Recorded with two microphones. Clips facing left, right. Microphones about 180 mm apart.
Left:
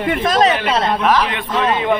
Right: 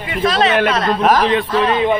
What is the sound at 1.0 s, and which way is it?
Speech, 40° right (ahead or behind).